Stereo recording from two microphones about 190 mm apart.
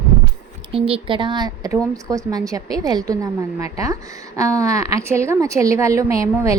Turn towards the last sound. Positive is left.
turn(degrees=-15)  # may be behind; listen again after turning